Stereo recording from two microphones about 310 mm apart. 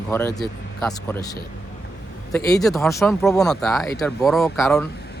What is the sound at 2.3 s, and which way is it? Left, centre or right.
Speech, centre.